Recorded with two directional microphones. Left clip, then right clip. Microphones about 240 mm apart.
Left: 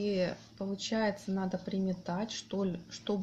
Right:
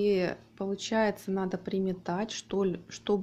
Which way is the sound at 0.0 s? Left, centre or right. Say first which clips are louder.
Right 5 dB; right.